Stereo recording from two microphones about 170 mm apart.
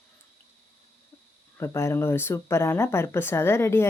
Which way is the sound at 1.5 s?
15° left (ahead or behind).